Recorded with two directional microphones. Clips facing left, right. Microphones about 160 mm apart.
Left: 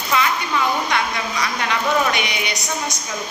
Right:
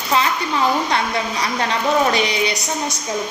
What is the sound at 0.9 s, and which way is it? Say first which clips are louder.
Speech: right 2 dB; 30° right (ahead or behind).